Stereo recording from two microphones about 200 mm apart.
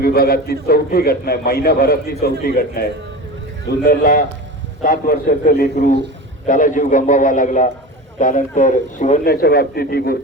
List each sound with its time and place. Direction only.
0.0 s a man's voice: 50° left (ahead or behind)
3.8 s a man's voice: 45° left (ahead or behind)